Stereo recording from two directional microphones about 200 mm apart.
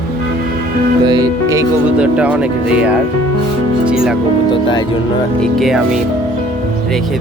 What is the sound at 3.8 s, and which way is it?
Music, 5° right (ahead or behind).